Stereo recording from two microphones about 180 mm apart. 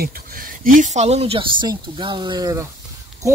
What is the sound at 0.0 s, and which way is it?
Speech, 55° right (ahead or behind).